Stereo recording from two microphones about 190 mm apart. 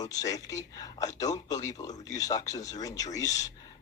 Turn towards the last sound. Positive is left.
turn(degrees=20)  # may be behind; listen again after turning